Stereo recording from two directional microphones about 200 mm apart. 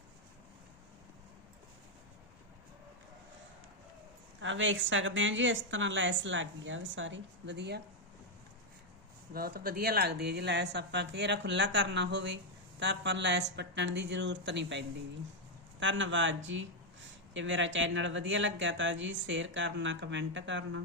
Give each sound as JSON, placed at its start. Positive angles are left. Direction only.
{"t": 4.4, "sound": "a woman's voice", "side_deg": -70}
{"t": 9.3, "sound": "a woman's voice", "side_deg": -50}